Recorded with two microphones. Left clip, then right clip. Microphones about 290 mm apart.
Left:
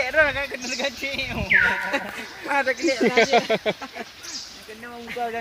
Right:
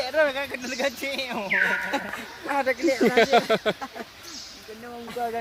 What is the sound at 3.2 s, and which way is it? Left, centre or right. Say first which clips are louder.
Speech: left 1 dB; centre.